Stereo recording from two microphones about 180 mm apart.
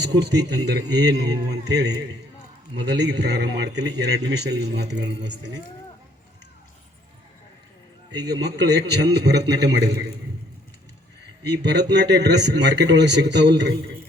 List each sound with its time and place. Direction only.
0.0 s a man's voice: 80° right
8.1 s a man's voice: 20° right (ahead or behind)
8.4 s a man's voice: 70° right (ahead or behind)
11.5 s a man's voice: 70° right (ahead or behind)